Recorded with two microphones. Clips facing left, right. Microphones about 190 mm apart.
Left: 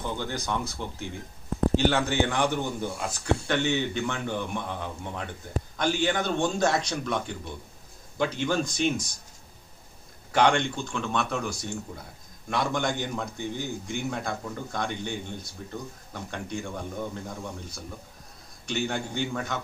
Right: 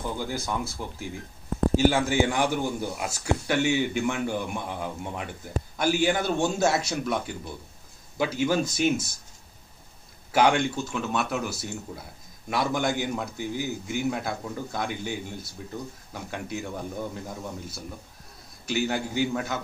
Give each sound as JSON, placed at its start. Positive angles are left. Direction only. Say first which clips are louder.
{"t": 0.0, "sound": "a man's voice", "louder": "right 1 dB", "side_deg": -5}
{"t": 10.3, "sound": "a man's voice", "louder": "right 1 dB", "side_deg": -5}